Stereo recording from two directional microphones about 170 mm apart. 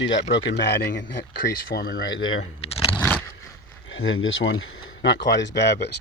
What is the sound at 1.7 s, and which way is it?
Speech, 60° left (ahead or behind).